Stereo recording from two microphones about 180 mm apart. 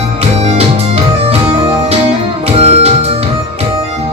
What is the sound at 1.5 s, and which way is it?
Music, 35° right (ahead or behind).